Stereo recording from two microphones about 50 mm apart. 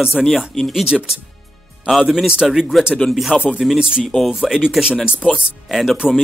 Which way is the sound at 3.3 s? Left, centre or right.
Centre.